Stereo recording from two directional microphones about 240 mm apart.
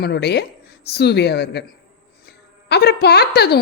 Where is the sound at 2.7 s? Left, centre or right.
Left.